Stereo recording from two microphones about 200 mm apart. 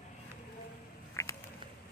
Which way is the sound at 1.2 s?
15° left (ahead or behind).